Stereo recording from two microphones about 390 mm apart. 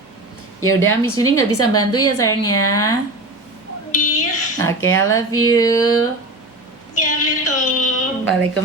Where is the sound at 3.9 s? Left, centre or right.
Centre.